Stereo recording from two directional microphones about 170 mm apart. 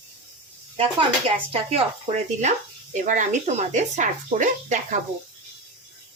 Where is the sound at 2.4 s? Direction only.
45° right (ahead or behind).